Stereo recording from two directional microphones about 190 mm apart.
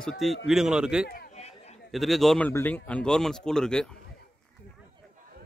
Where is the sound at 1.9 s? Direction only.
Centre (ahead or behind).